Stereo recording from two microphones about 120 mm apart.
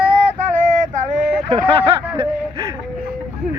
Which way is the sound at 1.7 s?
50° right (ahead or behind).